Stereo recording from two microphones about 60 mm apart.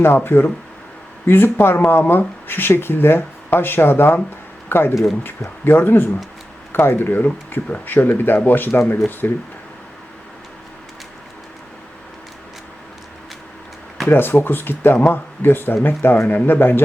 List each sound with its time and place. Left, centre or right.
0.0 s speech: left
14.1 s speech: left